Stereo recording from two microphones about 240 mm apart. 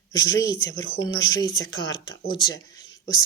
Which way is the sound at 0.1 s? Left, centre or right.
Left.